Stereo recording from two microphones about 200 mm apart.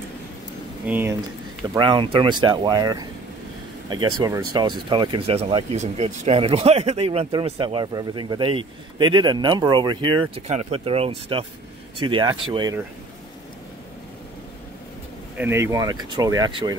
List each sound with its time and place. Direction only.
0.8 s speech: 10° right (ahead or behind)
1.7 s speech: 20° right (ahead or behind)
15.3 s speech: 10° right (ahead or behind)